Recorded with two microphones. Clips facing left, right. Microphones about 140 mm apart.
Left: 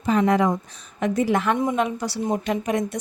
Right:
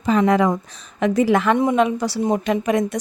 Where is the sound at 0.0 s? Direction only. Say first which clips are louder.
Right 3 dB; 90° right.